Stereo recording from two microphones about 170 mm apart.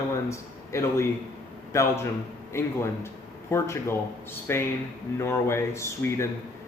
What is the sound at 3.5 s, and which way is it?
Speech, 15° left (ahead or behind).